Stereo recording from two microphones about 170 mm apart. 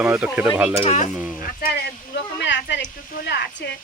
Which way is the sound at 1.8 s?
90° left.